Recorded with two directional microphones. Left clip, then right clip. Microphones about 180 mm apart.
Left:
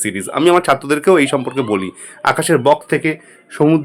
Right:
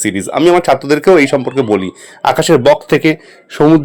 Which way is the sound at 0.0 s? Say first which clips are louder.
Right 4 dB; 25° right (ahead or behind).